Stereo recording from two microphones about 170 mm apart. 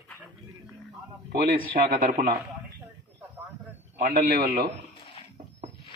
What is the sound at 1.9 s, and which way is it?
Speech, 60° right (ahead or behind).